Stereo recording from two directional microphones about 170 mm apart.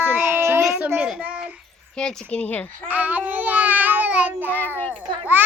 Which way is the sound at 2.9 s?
10° right (ahead or behind).